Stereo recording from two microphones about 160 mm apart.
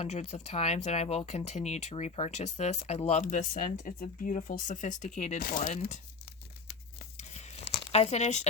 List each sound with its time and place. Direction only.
0.0 s speech: 45° left (ahead or behind)
5.4 s speech: 60° left (ahead or behind)
7.2 s crunch: 45° left (ahead or behind)
7.9 s speech: 40° left (ahead or behind)